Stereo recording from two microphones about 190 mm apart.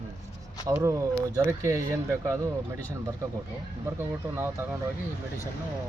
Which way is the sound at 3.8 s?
10° right (ahead or behind).